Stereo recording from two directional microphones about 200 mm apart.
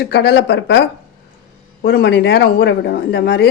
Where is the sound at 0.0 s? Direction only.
60° left (ahead or behind).